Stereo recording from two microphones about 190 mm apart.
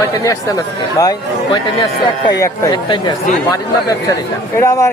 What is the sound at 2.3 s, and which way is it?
Speech, 20° left (ahead or behind).